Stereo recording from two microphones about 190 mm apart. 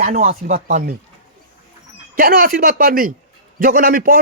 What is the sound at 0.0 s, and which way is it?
Speech, 35° right (ahead or behind).